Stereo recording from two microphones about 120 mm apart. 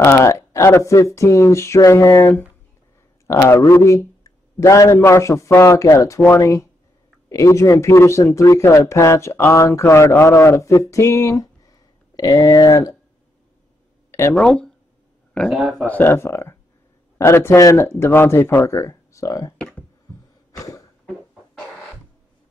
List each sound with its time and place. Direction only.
0.0 s speech: 20° left (ahead or behind)
14.3 s speech: 5° left (ahead or behind)
15.9 s speech: 20° left (ahead or behind)
20.5 s a sound: 30° left (ahead or behind)